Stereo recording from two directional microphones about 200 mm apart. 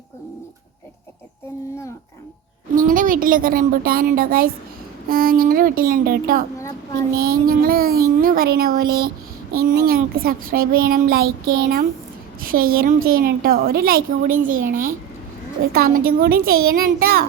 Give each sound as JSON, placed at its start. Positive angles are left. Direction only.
{"t": 2.7, "sound": "a woman's voice", "side_deg": -40}